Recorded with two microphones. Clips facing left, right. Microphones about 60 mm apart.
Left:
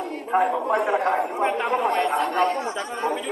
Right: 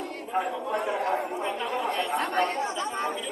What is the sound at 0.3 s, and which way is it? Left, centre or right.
A man's voice, left.